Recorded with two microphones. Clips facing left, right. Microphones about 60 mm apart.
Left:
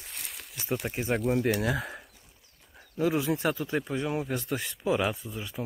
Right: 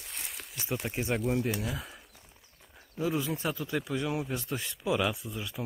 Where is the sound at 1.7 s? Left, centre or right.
Left.